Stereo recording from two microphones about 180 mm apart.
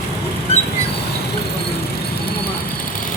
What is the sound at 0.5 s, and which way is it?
Rodents, 35° left (ahead or behind).